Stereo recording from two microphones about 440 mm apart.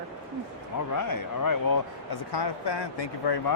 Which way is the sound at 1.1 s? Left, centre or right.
Left.